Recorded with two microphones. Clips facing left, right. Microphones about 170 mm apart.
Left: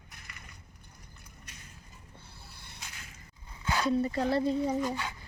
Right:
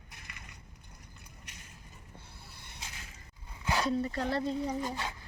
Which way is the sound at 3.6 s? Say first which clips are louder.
Left 1 dB; 20° right (ahead or behind).